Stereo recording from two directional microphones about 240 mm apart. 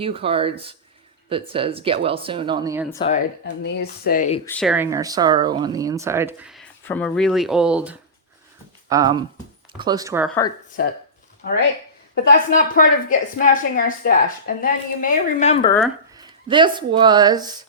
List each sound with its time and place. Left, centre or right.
0.0 s speech: right
3.4 s a woman's voice: left
4.6 s speech: centre
8.9 s speech: centre
10.2 s speech: centre
12.1 s a woman's voice: left
16.1 s speech: centre